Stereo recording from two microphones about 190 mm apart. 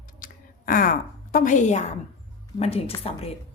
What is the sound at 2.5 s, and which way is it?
Speech, 30° left (ahead or behind).